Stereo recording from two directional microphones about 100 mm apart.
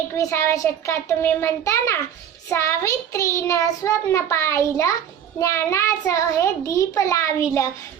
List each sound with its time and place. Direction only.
0.2 s a child's voice: 25° left (ahead or behind)